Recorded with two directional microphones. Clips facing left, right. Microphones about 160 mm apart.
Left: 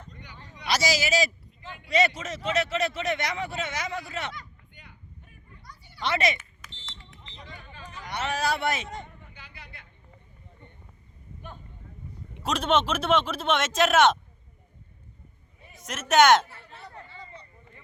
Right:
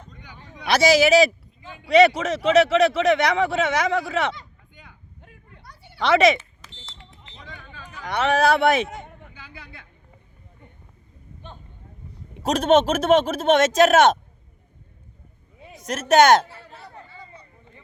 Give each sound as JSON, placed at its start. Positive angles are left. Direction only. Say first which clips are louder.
{"t": 0.4, "sound": "a man's voice", "louder": "right 8 dB", "side_deg": -60}
{"t": 5.2, "sound": "a sound", "louder": "right 4 dB", "side_deg": -80}
{"t": 6.3, "sound": "smoke detector", "louder": "right 10 dB", "side_deg": -30}
{"t": 7.8, "sound": "speech", "louder": "right 8 dB", "side_deg": -70}
{"t": 11.4, "sound": "cattle", "louder": "right 1 dB", "side_deg": -25}
{"t": 12.4, "sound": "speech", "louder": "right 7 dB", "side_deg": -45}
{"t": 15.8, "sound": "a man's voice", "louder": "right 4 dB", "side_deg": -35}
{"t": 16.7, "sound": "a sound", "louder": "left 1 dB", "side_deg": -10}